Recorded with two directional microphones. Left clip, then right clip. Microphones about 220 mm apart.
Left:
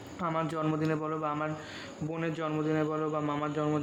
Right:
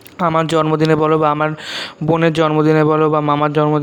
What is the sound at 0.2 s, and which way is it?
A man's voice, 45° right (ahead or behind).